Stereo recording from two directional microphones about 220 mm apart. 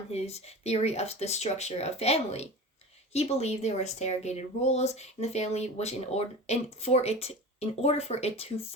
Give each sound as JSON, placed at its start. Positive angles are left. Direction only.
{"t": 0.1, "sound": "speech", "side_deg": 30}